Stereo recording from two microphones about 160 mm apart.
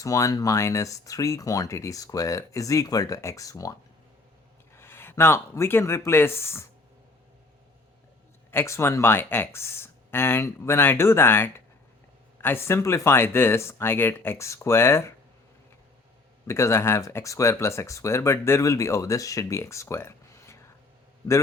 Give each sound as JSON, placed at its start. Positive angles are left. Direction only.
{"t": 0.0, "sound": "speech", "side_deg": 20}
{"t": 8.4, "sound": "speech", "side_deg": 15}
{"t": 16.5, "sound": "speech", "side_deg": 15}